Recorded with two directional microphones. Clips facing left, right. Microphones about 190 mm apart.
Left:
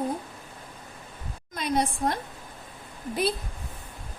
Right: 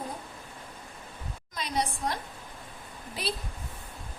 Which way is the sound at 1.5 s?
55° left (ahead or behind).